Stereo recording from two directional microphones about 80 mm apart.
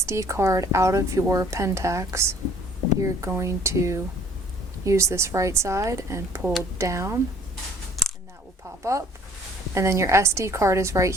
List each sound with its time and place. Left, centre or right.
0.0 s a woman's voice: right
8.0 s a sound: centre
8.8 s a woman's voice: right